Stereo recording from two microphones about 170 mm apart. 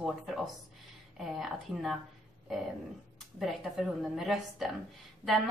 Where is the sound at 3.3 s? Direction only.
Centre (ahead or behind).